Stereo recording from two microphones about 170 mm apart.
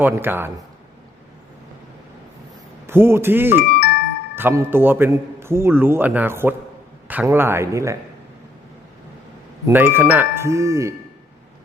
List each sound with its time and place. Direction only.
0.0 s a man's voice: 10° right (ahead or behind)
2.8 s a man's voice: 15° right (ahead or behind)
3.8 s music: 75° left (ahead or behind)
4.4 s a man's voice: 10° right (ahead or behind)
9.6 s a man's voice: 10° right (ahead or behind)